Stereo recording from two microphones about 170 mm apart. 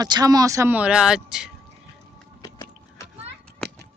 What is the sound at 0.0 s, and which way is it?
Speech, 20° right (ahead or behind).